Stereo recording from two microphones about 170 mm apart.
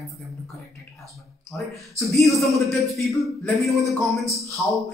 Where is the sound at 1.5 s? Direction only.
5° left (ahead or behind).